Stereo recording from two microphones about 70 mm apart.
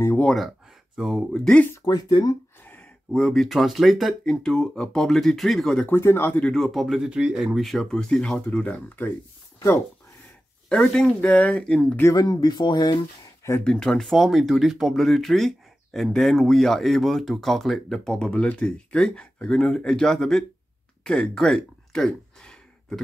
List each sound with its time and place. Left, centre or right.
0.9 s speech: centre
1.3 s speech: centre
1.9 s speech: left
3.1 s speech: centre
5.9 s speech: left
6.4 s speech: centre
7.1 s speech: centre
7.6 s speech: centre; by 9.1 s left
10.7 s speech: centre
12.1 s speech: left
13.7 s speech: centre
21.0 s a sound: centre